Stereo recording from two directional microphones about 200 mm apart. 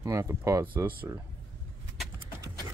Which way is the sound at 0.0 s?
15° right (ahead or behind).